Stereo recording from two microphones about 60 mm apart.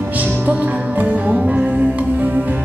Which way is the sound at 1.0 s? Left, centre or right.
Right.